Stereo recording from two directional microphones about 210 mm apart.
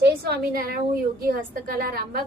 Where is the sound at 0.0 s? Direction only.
50° right (ahead or behind).